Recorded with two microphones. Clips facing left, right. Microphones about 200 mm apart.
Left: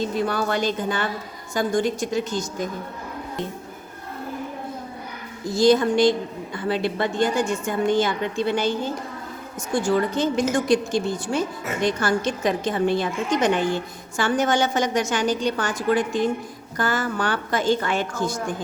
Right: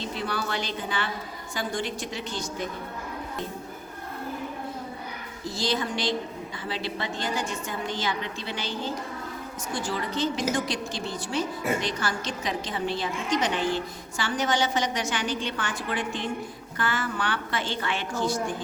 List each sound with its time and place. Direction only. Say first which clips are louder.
0.0 s a woman's voice: left 7 dB; 45° left (ahead or behind)
5.5 s a woman's voice: left 11 dB; 45° left (ahead or behind)